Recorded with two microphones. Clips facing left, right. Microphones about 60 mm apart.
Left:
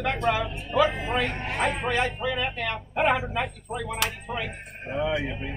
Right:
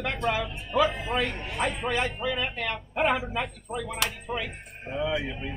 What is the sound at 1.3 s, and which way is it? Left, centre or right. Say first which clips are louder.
Speech: left 3 dB; left.